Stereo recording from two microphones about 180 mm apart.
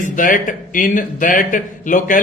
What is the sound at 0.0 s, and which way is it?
A man's voice, 45° left (ahead or behind).